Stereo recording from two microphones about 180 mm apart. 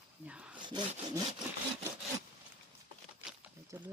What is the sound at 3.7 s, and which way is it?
Speech, 10° right (ahead or behind).